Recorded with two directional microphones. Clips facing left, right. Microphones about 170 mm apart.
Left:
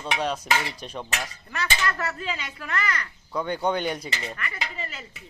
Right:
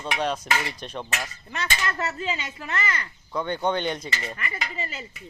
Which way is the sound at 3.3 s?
10° left (ahead or behind).